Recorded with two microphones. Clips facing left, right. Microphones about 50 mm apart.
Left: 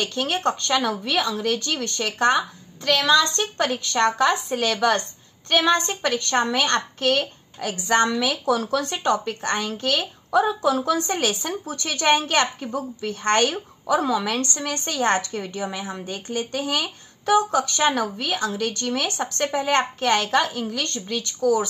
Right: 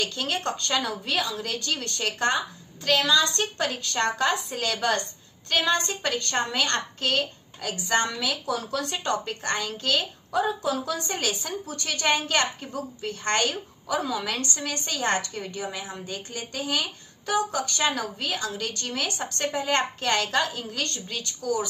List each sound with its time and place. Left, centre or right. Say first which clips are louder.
0.0 s a woman's voice: left 5 dB; left
1.3 s a woman's voice: left 5 dB; left
8.5 s speech: left 6 dB; left
9.1 s a woman's voice: left 4 dB; left
19.7 s a woman's voice: left 4 dB; left